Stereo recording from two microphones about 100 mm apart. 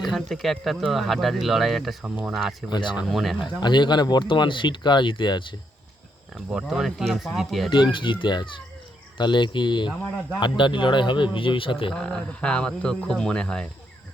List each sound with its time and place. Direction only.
0.0 s speech: centre (ahead or behind)
3.4 s speech: 50° left (ahead or behind)
6.5 s speech: 5° right (ahead or behind)
7.7 s speech: 55° left (ahead or behind)
11.9 s speech: 10° left (ahead or behind)